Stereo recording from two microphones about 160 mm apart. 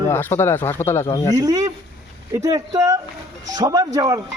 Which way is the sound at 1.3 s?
20° right (ahead or behind).